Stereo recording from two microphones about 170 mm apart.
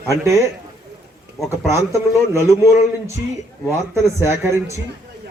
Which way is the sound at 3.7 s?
15° right (ahead or behind).